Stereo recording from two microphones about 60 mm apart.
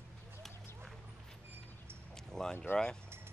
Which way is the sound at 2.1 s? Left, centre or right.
Centre.